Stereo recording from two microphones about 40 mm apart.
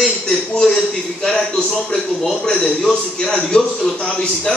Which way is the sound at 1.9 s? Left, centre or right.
Centre.